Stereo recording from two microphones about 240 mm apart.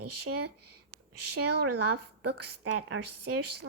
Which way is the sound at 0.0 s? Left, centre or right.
Right.